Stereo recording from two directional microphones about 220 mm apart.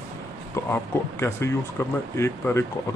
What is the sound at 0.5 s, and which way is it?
Speech, 10° left (ahead or behind).